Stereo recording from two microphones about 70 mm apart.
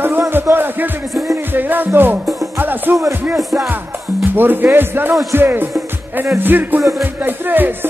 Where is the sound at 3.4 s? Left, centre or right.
Centre.